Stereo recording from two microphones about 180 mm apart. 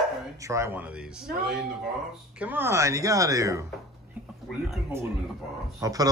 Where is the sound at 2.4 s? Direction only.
10° right (ahead or behind).